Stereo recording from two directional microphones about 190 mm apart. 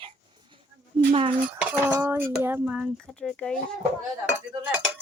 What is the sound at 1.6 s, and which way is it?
Dishes, 5° right (ahead or behind).